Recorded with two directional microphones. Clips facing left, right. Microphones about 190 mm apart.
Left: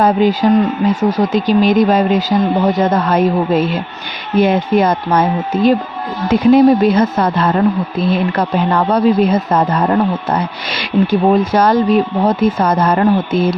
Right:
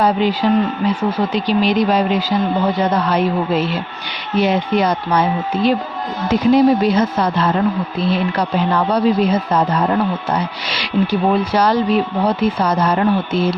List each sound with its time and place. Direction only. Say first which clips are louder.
0.0 s a woman's voice: left 4 dB; 45° left (ahead or behind)